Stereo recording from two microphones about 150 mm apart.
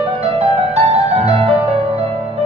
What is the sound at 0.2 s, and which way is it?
Music, 40° right (ahead or behind).